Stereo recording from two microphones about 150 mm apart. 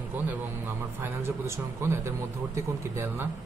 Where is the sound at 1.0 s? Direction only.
15° right (ahead or behind).